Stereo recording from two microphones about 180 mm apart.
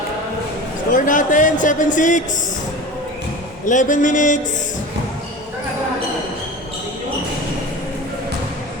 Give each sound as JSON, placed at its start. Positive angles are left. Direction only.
{"t": 0.9, "sound": "a man's voice", "side_deg": 45}
{"t": 3.7, "sound": "a man's voice", "side_deg": 45}